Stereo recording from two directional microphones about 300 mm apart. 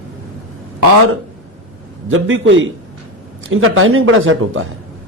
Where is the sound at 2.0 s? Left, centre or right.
Right.